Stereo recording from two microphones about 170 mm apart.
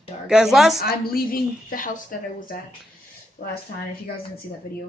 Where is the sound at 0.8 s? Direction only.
60° left (ahead or behind).